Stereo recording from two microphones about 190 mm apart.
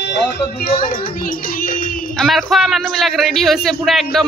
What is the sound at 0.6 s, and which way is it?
Child singing, 50° left (ahead or behind).